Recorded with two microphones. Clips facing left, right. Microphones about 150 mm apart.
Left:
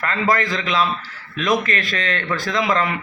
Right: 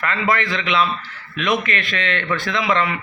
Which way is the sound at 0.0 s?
40° left (ahead or behind).